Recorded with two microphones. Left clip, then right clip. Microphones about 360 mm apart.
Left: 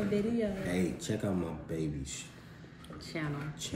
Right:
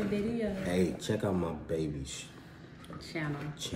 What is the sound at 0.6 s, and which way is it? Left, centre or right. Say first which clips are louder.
Speech: right 3 dB; centre.